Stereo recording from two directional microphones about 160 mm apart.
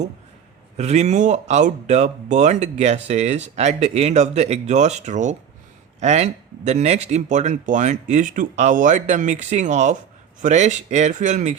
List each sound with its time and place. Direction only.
0.8 s speech: 45° right (ahead or behind)